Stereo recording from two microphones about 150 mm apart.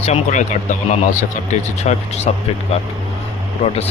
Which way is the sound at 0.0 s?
45° left (ahead or behind).